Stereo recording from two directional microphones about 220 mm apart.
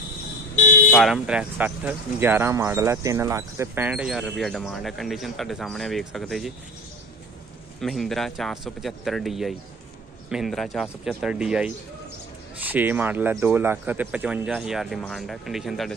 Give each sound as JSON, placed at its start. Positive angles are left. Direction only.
{"t": 0.8, "sound": "speech", "side_deg": 0}
{"t": 7.8, "sound": "speech", "side_deg": 0}